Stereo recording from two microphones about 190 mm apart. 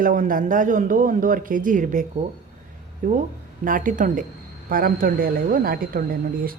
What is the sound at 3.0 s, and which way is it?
Speech, 45° right (ahead or behind).